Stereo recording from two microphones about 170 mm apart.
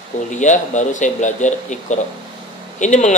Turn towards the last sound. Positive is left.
turn(degrees=45)  # may be behind; listen again after turning